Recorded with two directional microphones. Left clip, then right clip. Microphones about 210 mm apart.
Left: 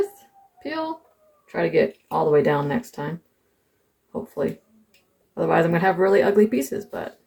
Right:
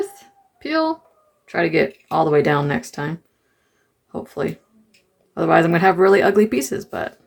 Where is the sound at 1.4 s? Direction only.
30° right (ahead or behind).